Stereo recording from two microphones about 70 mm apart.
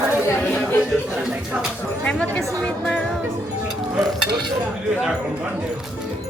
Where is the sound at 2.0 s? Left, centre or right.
Left.